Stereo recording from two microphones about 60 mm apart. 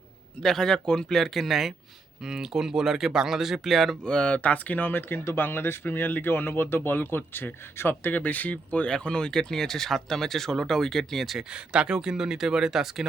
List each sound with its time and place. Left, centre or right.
0.4 s speech: centre
4.0 s speech: centre
8.9 s speech: centre
11.3 s speech: centre